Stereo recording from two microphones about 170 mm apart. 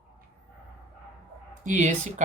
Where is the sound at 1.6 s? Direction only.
45° right (ahead or behind).